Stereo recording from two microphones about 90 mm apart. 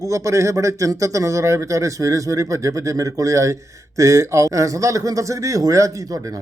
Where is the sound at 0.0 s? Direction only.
35° right (ahead or behind).